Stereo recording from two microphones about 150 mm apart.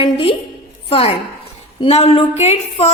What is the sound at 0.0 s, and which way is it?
A woman's voice, 35° left (ahead or behind).